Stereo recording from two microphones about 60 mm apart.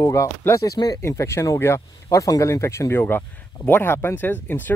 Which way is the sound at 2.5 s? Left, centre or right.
Left.